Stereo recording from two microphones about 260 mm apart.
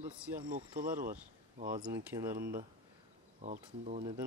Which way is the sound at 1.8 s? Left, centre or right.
Centre.